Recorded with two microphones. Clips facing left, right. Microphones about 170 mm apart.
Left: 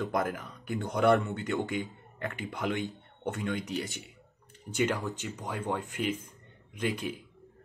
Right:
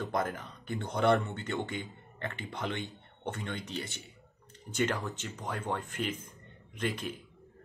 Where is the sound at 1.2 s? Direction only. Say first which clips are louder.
Left 4 dB; 15° left (ahead or behind).